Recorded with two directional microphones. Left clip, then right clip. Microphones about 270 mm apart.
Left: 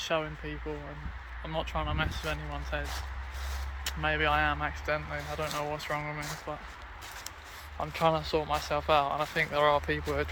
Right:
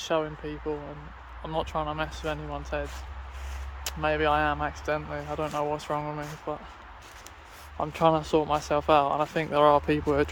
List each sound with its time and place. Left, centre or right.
0.0 s speech: right
3.8 s speech: right
7.8 s speech: right